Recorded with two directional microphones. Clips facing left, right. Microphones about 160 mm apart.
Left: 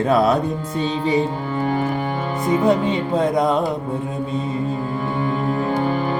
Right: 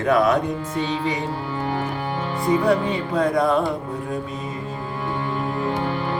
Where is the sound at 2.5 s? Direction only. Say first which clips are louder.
Left 2 dB; 20° left (ahead or behind).